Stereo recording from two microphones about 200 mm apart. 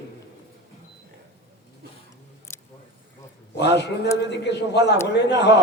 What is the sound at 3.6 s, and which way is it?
A man's voice, 60° left (ahead or behind).